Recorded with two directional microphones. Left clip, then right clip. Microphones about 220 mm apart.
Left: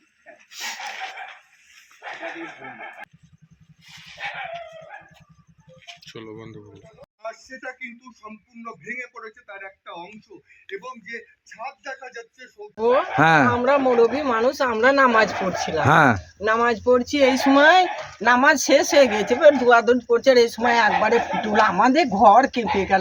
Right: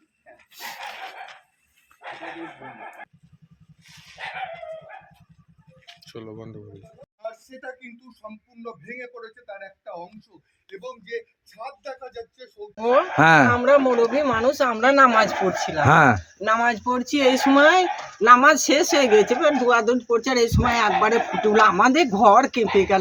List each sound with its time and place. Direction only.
0.5 s dog: 35° right (ahead or behind)
6.0 s speech: 45° right (ahead or behind)
7.6 s a man's voice: 45° right (ahead or behind)
13.1 s speech: 10° right (ahead or behind)
13.5 s speech: 5° left (ahead or behind)